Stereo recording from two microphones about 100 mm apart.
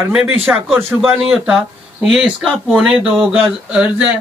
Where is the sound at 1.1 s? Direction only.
5° right (ahead or behind).